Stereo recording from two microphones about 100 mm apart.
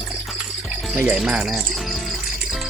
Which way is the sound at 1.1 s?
5° right (ahead or behind).